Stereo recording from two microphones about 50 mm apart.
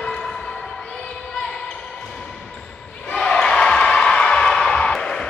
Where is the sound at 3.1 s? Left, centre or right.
Centre.